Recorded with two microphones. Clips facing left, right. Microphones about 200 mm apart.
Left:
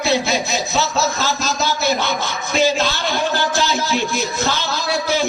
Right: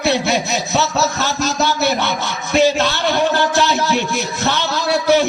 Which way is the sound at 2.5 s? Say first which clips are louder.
Right 3 dB; 65° right (ahead or behind).